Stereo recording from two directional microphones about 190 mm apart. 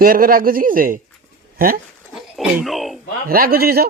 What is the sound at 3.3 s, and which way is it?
Speech, 50° right (ahead or behind).